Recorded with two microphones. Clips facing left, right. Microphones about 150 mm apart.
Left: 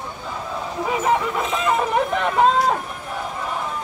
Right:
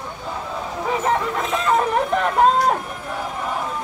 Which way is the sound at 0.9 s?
5° left (ahead or behind).